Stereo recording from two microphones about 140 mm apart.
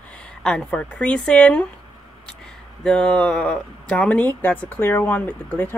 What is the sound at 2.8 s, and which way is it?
Speech, 5° left (ahead or behind).